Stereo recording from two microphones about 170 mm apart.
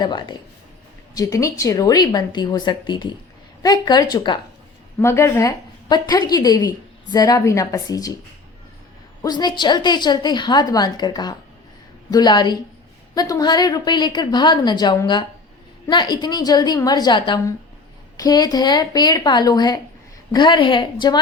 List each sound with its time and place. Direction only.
0.0 s a woman's voice: 25° left (ahead or behind)
9.2 s a woman's voice: 25° left (ahead or behind)